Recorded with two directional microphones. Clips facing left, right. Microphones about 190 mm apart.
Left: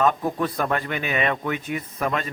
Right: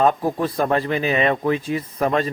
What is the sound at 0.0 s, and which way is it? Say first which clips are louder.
Speech: right 3 dB; 30° right (ahead or behind).